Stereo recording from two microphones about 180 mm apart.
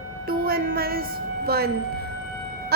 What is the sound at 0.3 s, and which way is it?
Music, 55° right (ahead or behind).